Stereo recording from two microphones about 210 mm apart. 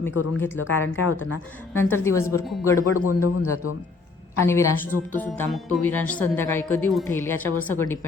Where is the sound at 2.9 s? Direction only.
90° left.